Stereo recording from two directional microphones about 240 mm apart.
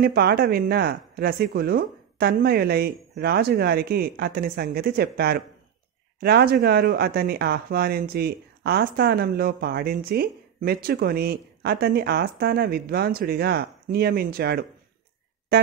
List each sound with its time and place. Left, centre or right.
0.0 s speech: right